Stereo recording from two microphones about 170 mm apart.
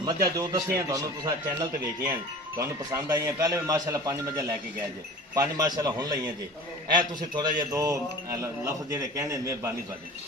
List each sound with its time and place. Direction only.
0.0 s a man's voice: 20° right (ahead or behind)
2.6 s a man's voice: 15° right (ahead or behind)